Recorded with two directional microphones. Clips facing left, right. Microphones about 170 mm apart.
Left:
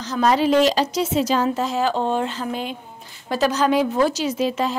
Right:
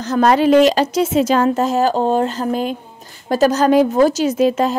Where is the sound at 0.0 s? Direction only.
55° right (ahead or behind).